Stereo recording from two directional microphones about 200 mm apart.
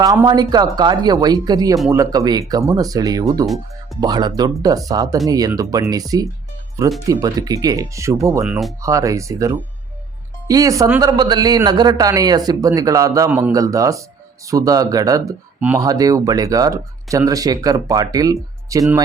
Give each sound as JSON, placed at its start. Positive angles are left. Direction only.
{"t": 0.0, "sound": "speech", "side_deg": -20}
{"t": 3.4, "sound": "speech", "side_deg": 0}
{"t": 4.0, "sound": "speech", "side_deg": -20}